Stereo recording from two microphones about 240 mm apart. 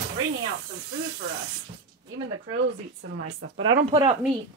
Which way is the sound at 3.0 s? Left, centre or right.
Right.